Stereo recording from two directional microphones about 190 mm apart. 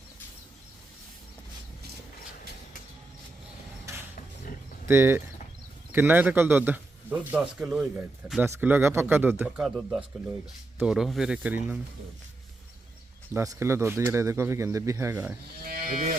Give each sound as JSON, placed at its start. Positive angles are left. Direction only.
{"t": 4.9, "sound": "a man's voice", "side_deg": -15}
{"t": 13.3, "sound": "a man's voice", "side_deg": -15}
{"t": 15.6, "sound": "moo", "side_deg": -50}